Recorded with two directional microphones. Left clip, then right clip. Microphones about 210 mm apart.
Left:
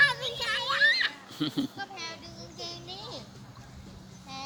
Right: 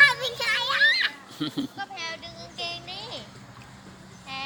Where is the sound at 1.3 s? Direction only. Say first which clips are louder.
Right 1 dB; 5° left (ahead or behind).